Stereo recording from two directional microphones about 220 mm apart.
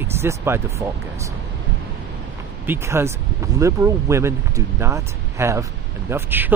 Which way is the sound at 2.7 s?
10° right (ahead or behind).